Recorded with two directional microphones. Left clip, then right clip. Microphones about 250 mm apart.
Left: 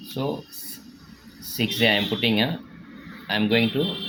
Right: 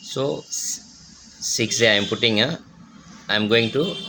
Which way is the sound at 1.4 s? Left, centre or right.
Right.